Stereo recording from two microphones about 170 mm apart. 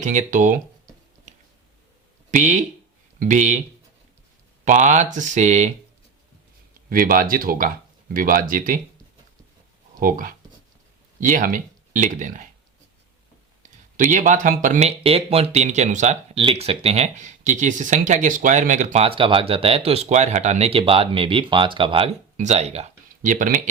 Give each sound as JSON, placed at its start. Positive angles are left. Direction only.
{"t": 0.0, "sound": "speech", "side_deg": -45}
{"t": 2.3, "sound": "speech", "side_deg": -45}
{"t": 4.6, "sound": "speech", "side_deg": -45}
{"t": 6.9, "sound": "speech", "side_deg": -55}
{"t": 10.0, "sound": "speech", "side_deg": -55}
{"t": 13.6, "sound": "speech", "side_deg": -50}
{"t": 16.4, "sound": "speech", "side_deg": -35}